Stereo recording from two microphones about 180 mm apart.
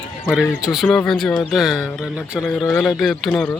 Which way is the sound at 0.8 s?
5° left (ahead or behind).